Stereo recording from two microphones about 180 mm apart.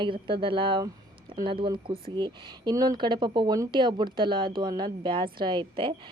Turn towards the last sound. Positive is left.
turn(degrees=-30)  # may be behind; listen again after turning